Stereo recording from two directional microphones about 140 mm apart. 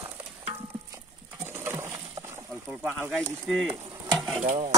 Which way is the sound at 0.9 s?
20° right (ahead or behind).